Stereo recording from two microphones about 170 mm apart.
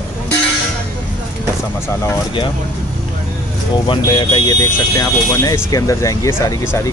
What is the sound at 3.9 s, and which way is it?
Speech, 30° left (ahead or behind).